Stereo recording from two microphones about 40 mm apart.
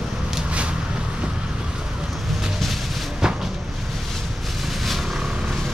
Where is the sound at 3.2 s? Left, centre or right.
Centre.